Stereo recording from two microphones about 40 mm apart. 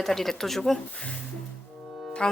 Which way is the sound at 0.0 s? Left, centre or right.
Centre.